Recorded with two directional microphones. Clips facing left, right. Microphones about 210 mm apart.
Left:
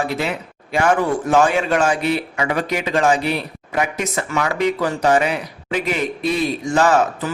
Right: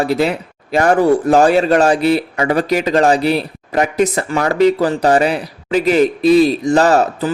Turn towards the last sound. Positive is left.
turn(degrees=-35)  # may be behind; listen again after turning